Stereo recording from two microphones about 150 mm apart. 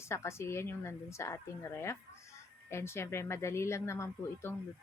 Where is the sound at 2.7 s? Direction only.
15° left (ahead or behind).